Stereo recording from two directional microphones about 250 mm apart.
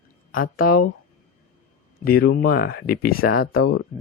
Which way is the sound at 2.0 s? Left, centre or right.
Left.